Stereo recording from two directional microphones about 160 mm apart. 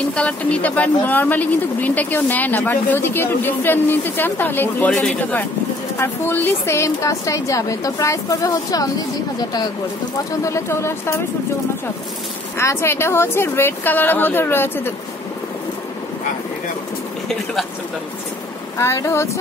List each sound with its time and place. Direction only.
0.1 s a woman's voice: 10° left (ahead or behind)
10.4 s speech: 20° left (ahead or behind)
12.5 s speech: 15° left (ahead or behind)
18.8 s speech: 20° left (ahead or behind)